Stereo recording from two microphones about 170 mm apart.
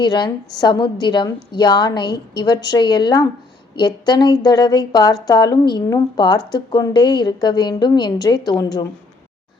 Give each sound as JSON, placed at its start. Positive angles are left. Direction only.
{"t": 0.0, "sound": "a woman's voice", "side_deg": 25}